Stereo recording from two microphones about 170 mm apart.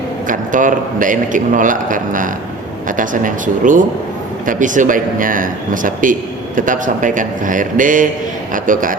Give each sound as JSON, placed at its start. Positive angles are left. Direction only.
{"t": 0.3, "sound": "a man's voice", "side_deg": -50}